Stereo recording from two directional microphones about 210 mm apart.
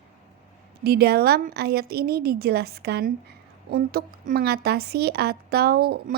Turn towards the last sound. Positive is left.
turn(degrees=-45)  # may be behind; listen again after turning